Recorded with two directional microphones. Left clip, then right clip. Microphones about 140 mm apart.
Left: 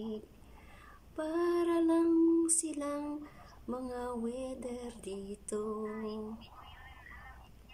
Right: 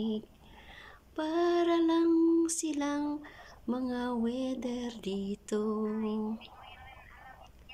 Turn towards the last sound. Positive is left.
turn(degrees=-20)  # may be behind; listen again after turning